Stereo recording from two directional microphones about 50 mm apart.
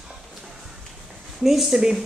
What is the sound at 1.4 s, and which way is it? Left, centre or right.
Speech, centre.